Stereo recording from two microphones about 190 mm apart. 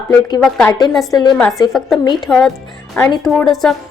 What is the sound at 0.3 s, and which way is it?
Speech, 5° left (ahead or behind).